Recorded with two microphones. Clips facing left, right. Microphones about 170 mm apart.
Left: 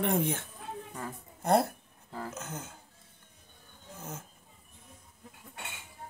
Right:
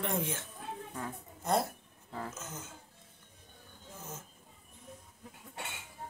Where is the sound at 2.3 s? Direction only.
65° left (ahead or behind).